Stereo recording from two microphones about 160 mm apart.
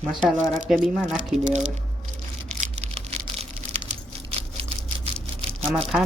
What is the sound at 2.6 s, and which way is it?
Crushing, 40° right (ahead or behind).